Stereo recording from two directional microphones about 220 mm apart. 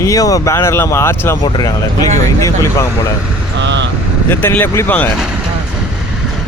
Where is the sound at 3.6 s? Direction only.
55° right (ahead or behind).